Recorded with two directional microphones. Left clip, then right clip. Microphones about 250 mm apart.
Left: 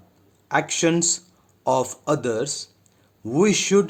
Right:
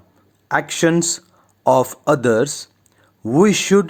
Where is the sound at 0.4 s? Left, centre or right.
Centre.